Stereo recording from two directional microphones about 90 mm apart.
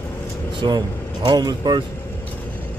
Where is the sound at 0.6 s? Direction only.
55° right (ahead or behind).